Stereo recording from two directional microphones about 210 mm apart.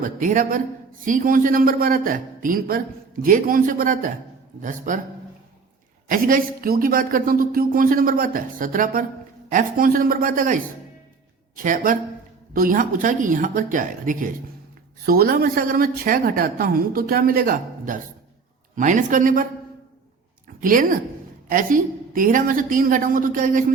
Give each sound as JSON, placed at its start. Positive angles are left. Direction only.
{"t": 0.0, "sound": "a man's voice", "side_deg": -40}
{"t": 6.1, "sound": "a man's voice", "side_deg": -40}
{"t": 20.6, "sound": "a man's voice", "side_deg": -40}